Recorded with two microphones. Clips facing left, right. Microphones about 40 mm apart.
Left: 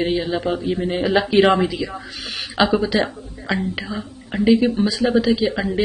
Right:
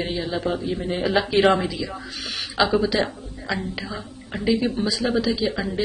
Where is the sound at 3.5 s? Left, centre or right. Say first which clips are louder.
Left 4 dB; left.